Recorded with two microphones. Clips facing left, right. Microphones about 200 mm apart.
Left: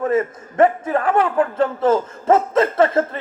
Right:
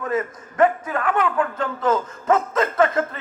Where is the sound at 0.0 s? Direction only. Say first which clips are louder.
Left 5 dB; 25° left (ahead or behind).